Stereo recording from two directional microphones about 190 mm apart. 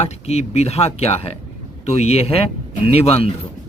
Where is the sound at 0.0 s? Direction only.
35° left (ahead or behind).